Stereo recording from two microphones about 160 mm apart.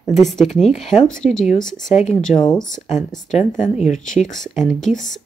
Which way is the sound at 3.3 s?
50° left (ahead or behind).